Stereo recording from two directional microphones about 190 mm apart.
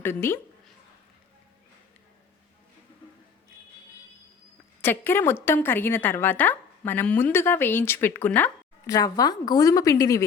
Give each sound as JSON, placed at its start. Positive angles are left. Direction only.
{"t": 0.0, "sound": "a woman's voice", "side_deg": 10}
{"t": 4.8, "sound": "a woman's voice", "side_deg": 10}
{"t": 8.9, "sound": "a woman's voice", "side_deg": 20}